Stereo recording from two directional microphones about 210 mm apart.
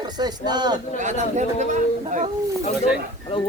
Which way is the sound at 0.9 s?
35° right (ahead or behind).